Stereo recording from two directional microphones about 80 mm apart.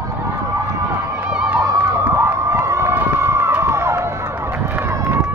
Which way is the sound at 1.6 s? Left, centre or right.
Right.